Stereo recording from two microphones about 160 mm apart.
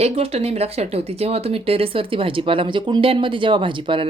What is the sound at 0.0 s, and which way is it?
Speech, 40° right (ahead or behind).